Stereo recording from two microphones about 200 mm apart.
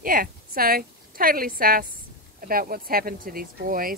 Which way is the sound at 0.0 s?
45° right (ahead or behind).